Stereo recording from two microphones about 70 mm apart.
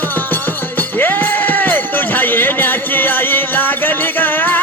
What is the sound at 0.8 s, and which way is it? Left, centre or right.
Music, left.